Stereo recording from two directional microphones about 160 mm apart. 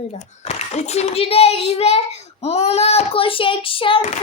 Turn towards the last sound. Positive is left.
turn(degrees=35)  # may be behind; listen again after turning